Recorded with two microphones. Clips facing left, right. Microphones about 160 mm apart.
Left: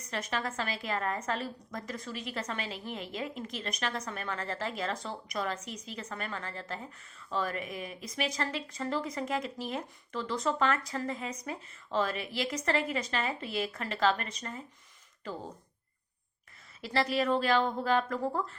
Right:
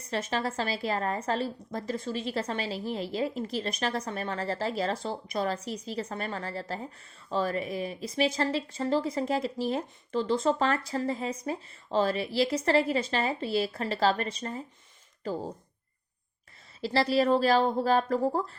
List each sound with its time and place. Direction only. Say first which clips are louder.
0.0 s a woman's voice: right 4 dB; 30° right (ahead or behind)
16.8 s a woman's voice: right 5 dB; 30° right (ahead or behind)